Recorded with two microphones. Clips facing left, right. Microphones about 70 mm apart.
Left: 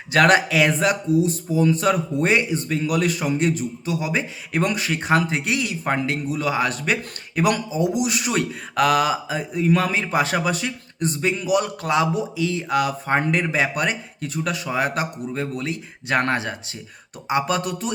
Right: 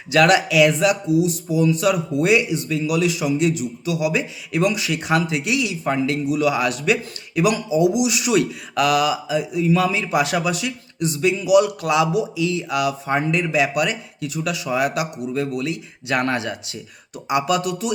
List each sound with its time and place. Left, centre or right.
0.1 s speech: left